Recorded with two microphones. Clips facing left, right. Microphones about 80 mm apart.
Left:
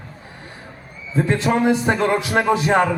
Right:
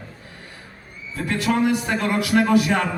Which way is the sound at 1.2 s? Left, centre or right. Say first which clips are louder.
Left 3 dB; left.